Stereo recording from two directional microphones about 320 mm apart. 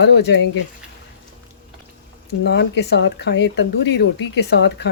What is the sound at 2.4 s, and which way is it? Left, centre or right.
Speech, left.